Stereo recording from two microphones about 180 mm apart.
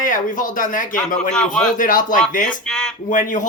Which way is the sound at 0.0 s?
45° left (ahead or behind).